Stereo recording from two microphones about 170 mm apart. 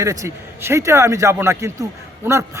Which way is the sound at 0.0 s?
20° right (ahead or behind).